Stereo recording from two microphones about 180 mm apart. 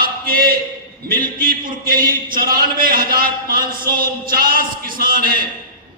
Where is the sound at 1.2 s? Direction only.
50° right (ahead or behind).